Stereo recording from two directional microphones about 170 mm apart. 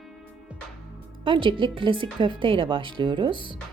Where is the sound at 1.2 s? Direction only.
30° right (ahead or behind).